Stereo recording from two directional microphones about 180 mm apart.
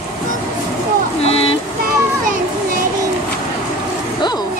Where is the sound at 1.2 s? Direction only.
35° left (ahead or behind).